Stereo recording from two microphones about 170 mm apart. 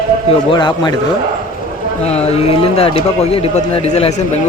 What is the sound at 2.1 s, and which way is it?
A man's voice, 35° left (ahead or behind).